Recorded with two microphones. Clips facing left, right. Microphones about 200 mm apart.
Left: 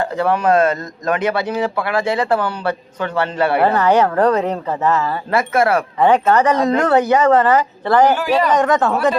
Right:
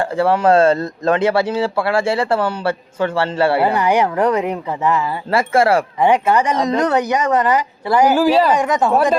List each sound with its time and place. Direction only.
0.2 s a man's voice: 30° right (ahead or behind)
3.6 s speech: 15° right (ahead or behind)
5.3 s a man's voice: 30° right (ahead or behind)
6.0 s speech: 10° right (ahead or behind)
8.2 s speech: 30° right (ahead or behind)
8.5 s speech: 15° right (ahead or behind)